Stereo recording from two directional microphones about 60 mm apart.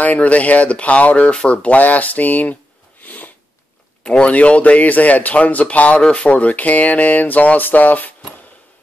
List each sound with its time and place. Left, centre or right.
0.0 s speech: left
3.0 s sniff: left
4.0 s speech: centre